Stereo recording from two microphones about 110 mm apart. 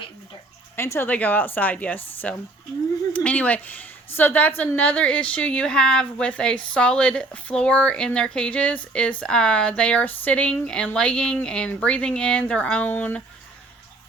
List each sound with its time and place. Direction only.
0.8 s a woman's voice: 20° left (ahead or behind)